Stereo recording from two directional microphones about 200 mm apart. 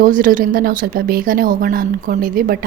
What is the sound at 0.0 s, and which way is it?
Speech, 45° right (ahead or behind).